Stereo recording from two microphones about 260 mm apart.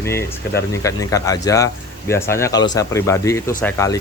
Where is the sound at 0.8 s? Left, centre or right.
Centre.